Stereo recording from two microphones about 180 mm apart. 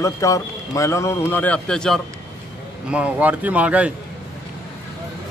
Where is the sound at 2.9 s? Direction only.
5° right (ahead or behind).